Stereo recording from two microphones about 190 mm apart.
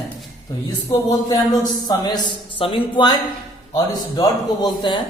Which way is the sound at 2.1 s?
25° left (ahead or behind).